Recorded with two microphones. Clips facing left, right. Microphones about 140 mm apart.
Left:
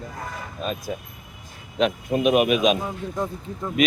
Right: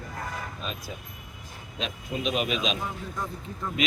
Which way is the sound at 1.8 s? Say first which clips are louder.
Left 11 dB; 55° left (ahead or behind).